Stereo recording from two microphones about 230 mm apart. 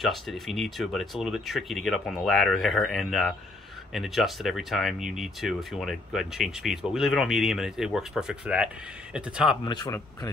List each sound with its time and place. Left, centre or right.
0.0 s speech: centre
9.7 s speech: centre